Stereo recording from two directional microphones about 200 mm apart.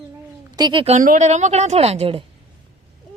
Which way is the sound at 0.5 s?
25° right (ahead or behind).